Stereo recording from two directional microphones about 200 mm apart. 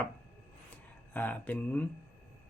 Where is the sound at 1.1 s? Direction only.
10° left (ahead or behind).